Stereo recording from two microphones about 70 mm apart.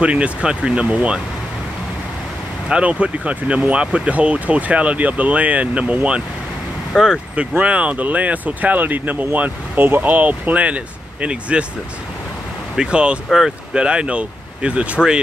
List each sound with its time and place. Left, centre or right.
0.0 s speech: centre
2.7 s speech: centre
7.0 s speech: centre
12.7 s speech: centre